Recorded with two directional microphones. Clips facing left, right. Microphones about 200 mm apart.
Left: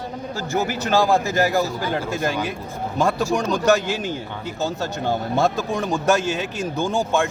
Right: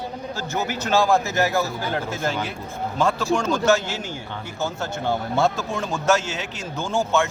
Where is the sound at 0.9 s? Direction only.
15° left (ahead or behind).